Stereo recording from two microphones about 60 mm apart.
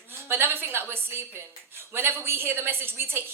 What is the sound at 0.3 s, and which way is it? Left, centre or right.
A woman's voice, right.